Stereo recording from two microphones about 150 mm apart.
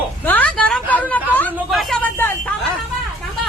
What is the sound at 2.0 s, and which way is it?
Speech, 15° left (ahead or behind).